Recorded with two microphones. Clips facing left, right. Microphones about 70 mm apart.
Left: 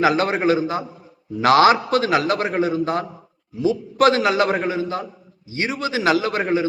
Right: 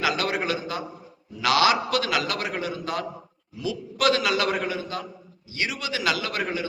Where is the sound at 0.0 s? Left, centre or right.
Left.